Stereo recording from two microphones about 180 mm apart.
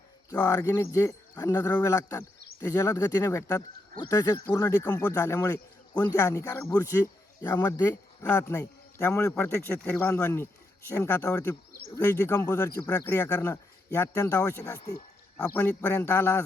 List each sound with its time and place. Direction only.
0.3 s speech: 20° left (ahead or behind)